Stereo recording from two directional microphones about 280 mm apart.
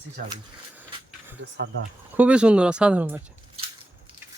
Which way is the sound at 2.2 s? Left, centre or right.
Centre.